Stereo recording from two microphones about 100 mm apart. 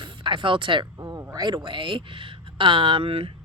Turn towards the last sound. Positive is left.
turn(degrees=-70)  # may be behind; listen again after turning